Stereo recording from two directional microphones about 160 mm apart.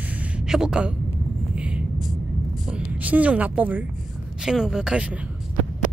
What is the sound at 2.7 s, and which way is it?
A woman's voice, 10° right (ahead or behind).